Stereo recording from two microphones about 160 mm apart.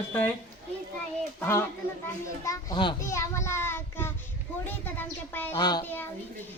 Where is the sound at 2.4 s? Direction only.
20° left (ahead or behind).